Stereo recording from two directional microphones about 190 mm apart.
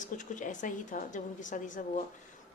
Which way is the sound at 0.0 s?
40° left (ahead or behind).